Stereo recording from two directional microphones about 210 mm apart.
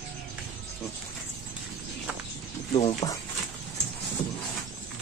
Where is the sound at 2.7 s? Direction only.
20° left (ahead or behind).